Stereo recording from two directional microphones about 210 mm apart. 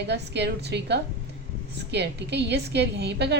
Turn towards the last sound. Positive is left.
turn(degrees=-55)  # may be behind; listen again after turning